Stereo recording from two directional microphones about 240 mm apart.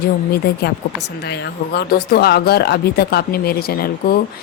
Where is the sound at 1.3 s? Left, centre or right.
Left.